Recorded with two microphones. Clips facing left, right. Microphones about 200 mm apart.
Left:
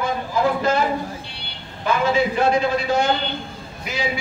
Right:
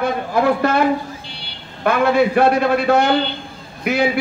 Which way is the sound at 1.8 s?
60° right (ahead or behind).